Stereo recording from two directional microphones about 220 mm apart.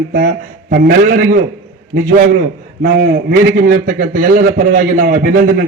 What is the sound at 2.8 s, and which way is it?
A man's voice, 40° right (ahead or behind).